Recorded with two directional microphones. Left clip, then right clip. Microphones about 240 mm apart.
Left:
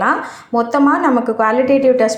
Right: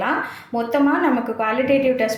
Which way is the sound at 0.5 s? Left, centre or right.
Centre.